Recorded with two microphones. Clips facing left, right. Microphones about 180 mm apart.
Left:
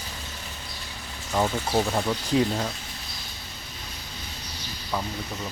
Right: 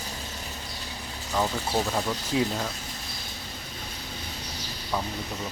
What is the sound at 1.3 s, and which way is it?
Speech, 15° left (ahead or behind).